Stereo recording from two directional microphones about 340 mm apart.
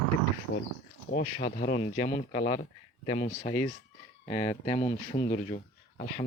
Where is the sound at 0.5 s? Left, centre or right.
Left.